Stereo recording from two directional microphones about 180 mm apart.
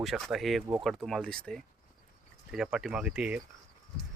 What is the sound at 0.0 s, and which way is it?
Speech, centre (ahead or behind).